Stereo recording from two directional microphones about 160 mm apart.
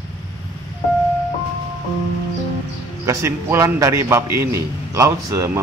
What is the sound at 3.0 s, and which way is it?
A man's voice, 20° right (ahead or behind).